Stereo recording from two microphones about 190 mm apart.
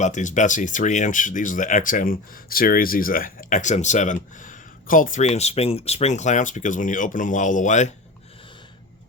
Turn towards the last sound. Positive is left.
turn(degrees=40)  # may be behind; listen again after turning